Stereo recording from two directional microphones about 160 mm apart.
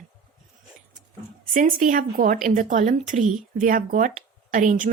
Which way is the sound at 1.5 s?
60° right (ahead or behind).